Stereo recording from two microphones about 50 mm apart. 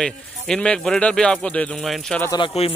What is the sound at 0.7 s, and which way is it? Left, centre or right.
Speech, left.